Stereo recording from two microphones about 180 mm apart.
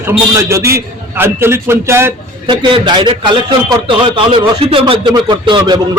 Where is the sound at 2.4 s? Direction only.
25° right (ahead or behind).